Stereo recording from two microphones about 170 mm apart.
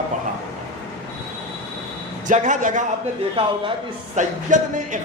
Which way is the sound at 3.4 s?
30° right (ahead or behind).